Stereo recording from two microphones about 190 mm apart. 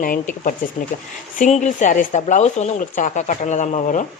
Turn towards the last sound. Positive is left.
turn(degrees=40)  # may be behind; listen again after turning